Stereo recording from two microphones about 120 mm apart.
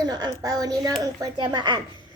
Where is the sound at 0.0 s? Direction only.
35° right (ahead or behind).